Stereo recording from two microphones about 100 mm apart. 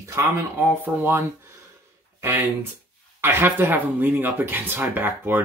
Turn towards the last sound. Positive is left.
turn(degrees=-20)  # may be behind; listen again after turning